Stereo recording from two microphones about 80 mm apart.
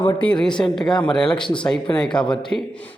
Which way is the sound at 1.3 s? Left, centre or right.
Left.